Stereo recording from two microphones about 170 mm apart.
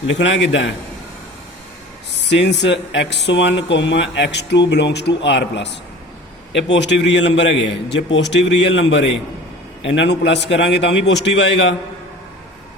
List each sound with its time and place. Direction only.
0.1 s a man's voice: 90° left
2.3 s a man's voice: 90° left